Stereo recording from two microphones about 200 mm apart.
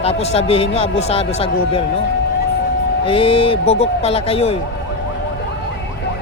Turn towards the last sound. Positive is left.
turn(degrees=30)  # may be behind; listen again after turning